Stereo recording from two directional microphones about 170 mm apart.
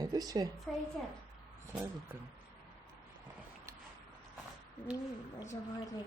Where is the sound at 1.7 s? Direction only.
10° right (ahead or behind).